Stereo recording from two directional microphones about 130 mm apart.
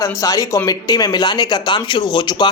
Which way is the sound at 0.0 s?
25° left (ahead or behind).